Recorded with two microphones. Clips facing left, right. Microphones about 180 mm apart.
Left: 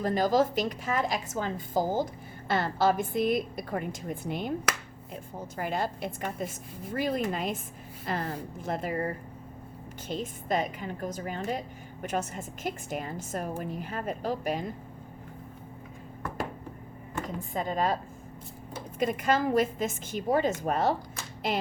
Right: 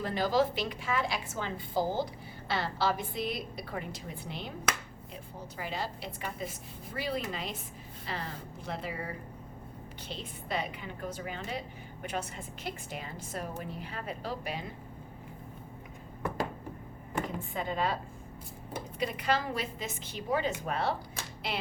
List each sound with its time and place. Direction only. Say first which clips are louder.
0.0 s a woman's voice: left 4 dB; 40° left (ahead or behind)
10.1 s a woman's voice: left 7 dB; 45° left (ahead or behind)
17.2 s speech: left 3 dB; 40° left (ahead or behind)
18.9 s a woman's voice: left 5 dB; 45° left (ahead or behind)